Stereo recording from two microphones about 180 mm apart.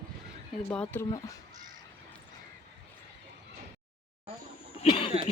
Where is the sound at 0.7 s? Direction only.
10° left (ahead or behind).